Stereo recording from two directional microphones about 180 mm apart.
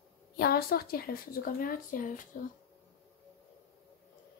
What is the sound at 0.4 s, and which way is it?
Speech, 60° left (ahead or behind).